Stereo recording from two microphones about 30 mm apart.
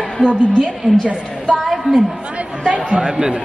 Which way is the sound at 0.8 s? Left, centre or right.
Left.